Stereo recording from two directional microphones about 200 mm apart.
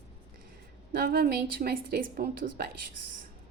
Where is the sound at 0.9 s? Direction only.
50° right (ahead or behind).